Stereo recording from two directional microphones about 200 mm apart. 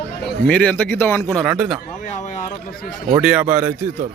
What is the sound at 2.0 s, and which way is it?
Speech, 35° left (ahead or behind).